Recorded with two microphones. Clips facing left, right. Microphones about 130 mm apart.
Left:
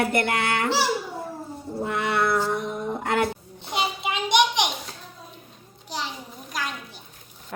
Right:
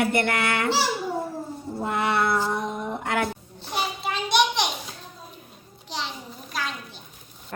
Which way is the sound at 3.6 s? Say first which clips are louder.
Left 1 dB; 20° left (ahead or behind).